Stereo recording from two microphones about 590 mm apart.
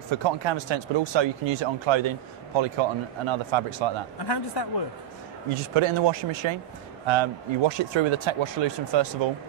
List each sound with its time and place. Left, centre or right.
0.2 s speech: right
4.3 s speech: left
5.5 s speech: right